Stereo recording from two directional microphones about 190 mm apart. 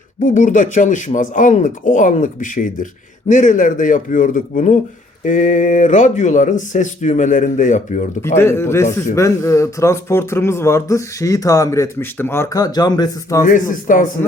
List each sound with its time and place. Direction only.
0.2 s speech: 45° left (ahead or behind)
8.4 s speech: 15° left (ahead or behind)
13.4 s speech: 45° left (ahead or behind)